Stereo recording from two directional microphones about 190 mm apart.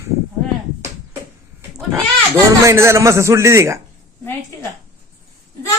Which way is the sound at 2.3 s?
15° right (ahead or behind).